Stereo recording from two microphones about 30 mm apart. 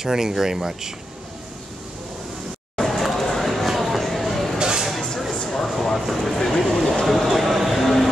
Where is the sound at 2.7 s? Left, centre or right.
Centre.